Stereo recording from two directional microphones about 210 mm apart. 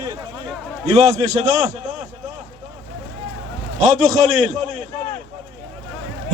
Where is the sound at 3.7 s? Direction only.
35° right (ahead or behind).